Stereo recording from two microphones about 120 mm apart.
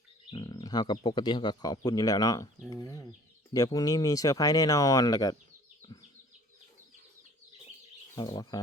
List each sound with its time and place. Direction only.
0.3 s speech: 40° left (ahead or behind)
8.4 s speech: 35° left (ahead or behind)